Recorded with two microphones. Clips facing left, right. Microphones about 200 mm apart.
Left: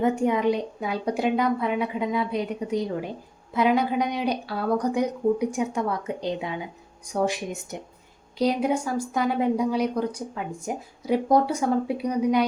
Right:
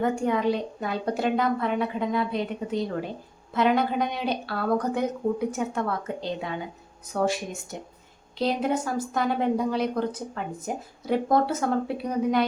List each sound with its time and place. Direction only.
0.0 s speech: 20° left (ahead or behind)